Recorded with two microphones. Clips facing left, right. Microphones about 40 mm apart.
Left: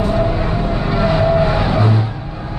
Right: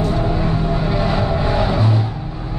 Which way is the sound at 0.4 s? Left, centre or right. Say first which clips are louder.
Left 1 dB; left.